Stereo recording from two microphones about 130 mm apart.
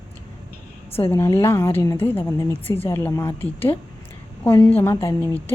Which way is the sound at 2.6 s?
45° left (ahead or behind).